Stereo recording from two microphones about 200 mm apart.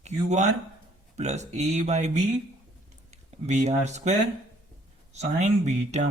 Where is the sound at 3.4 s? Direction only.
35° right (ahead or behind).